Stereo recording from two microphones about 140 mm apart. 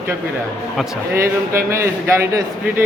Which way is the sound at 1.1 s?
20° right (ahead or behind).